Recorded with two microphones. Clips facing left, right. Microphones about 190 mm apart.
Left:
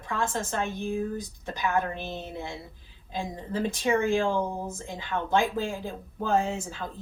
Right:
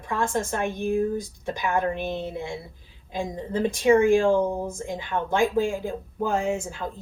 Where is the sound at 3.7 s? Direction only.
15° right (ahead or behind).